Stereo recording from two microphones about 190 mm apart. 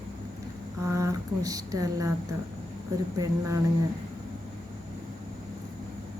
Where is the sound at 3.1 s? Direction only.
20° right (ahead or behind).